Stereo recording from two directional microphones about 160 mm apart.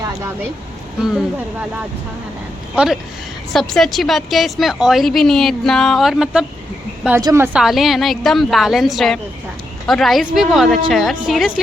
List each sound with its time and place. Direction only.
2.7 s a woman's voice: 5° right (ahead or behind)
7.2 s a woman's voice: 20° right (ahead or behind)
7.6 s a woman's voice: centre (ahead or behind)